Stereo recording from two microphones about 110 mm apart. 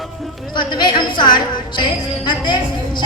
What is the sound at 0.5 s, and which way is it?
A woman's voice, 45° left (ahead or behind).